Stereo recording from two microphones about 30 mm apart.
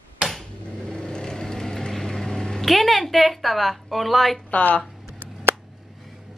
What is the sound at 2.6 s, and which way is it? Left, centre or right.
A woman's voice, centre.